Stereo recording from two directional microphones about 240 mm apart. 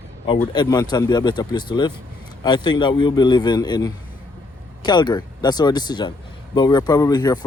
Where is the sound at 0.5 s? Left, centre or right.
Centre.